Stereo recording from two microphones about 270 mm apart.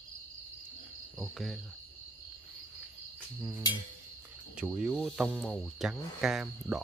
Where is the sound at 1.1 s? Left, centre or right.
Centre.